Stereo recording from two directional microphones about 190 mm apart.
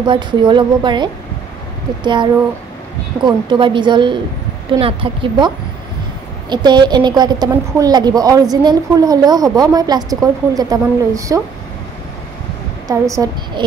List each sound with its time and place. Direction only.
0.0 s a woman's voice: 25° right (ahead or behind)
3.3 s a woman's voice: 25° right (ahead or behind)
6.5 s a woman's voice: 25° right (ahead or behind)
12.8 s a woman's voice: 15° right (ahead or behind)